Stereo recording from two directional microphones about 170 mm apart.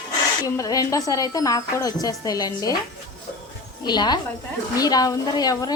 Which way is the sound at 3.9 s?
25° left (ahead or behind).